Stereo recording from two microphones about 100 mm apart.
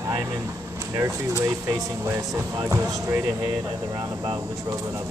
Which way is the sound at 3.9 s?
45° right (ahead or behind).